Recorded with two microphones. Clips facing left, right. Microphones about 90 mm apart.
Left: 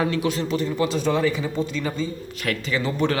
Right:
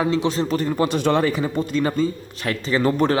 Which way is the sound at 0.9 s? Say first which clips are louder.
Right 2 dB; 65° right (ahead or behind).